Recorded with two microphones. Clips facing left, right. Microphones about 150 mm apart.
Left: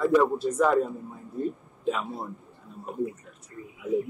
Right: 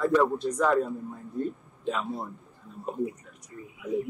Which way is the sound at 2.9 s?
25° right (ahead or behind).